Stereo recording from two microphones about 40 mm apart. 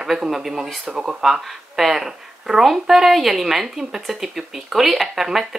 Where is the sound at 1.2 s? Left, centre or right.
Centre.